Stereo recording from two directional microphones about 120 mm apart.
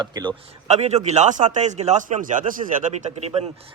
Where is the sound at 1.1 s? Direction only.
85° right.